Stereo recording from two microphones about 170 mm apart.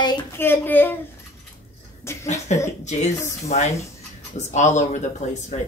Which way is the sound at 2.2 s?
45° left (ahead or behind).